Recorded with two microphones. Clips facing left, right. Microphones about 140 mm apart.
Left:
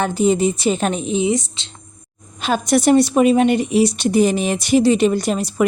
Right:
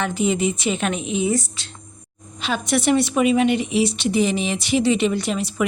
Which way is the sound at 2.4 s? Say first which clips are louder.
Left 5 dB; 45° left (ahead or behind).